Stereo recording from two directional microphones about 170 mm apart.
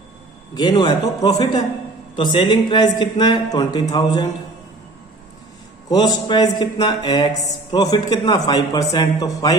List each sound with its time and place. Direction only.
0.6 s mantra: 25° left (ahead or behind)
5.9 s mantra: 25° left (ahead or behind)